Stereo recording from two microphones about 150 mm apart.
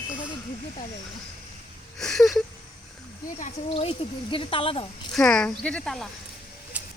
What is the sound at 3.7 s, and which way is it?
Speech, 40° left (ahead or behind).